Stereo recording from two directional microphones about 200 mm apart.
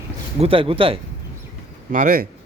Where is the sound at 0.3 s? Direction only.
25° right (ahead or behind).